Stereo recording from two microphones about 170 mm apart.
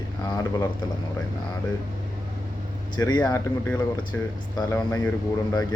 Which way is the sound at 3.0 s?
25° left (ahead or behind).